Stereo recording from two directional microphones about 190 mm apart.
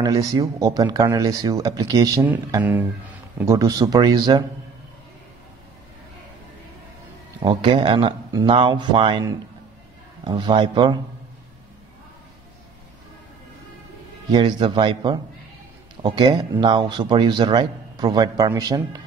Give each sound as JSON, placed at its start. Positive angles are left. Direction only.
{"t": 0.0, "sound": "speech", "side_deg": -20}
{"t": 7.4, "sound": "speech", "side_deg": -25}
{"t": 14.3, "sound": "speech", "side_deg": -25}